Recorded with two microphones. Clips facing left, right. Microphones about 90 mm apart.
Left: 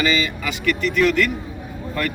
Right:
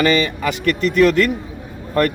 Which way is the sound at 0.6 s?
45° right (ahead or behind).